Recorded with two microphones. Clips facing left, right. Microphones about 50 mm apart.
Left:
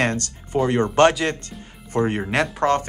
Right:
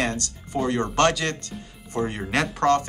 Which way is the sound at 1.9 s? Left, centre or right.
Left.